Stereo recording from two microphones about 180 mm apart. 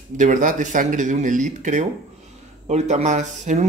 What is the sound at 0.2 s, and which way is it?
Speech, 45° right (ahead or behind).